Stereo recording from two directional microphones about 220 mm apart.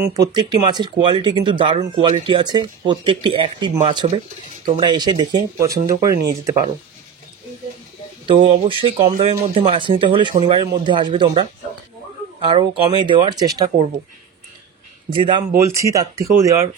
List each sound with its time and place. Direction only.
0.0 s speech: 15° right (ahead or behind)
8.3 s speech: 25° right (ahead or behind)
12.4 s speech: 20° right (ahead or behind)
15.1 s speech: 20° right (ahead or behind)